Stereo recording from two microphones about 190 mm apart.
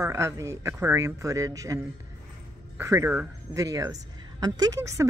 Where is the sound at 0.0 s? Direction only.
15° right (ahead or behind).